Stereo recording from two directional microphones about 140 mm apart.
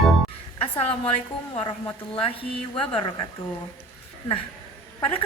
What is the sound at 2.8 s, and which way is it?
Speech, 35° left (ahead or behind).